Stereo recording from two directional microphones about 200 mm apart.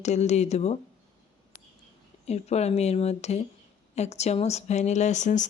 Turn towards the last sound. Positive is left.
turn(degrees=35)  # may be behind; listen again after turning